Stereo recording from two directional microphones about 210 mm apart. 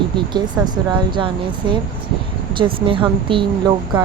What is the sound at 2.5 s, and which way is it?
Speech, 25° right (ahead or behind).